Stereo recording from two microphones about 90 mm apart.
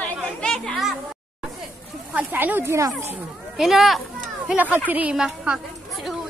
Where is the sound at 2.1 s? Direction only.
20° right (ahead or behind).